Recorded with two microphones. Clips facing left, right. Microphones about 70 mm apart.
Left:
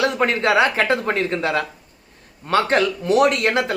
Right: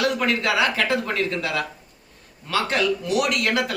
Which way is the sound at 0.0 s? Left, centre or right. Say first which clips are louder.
Left 3 dB; left.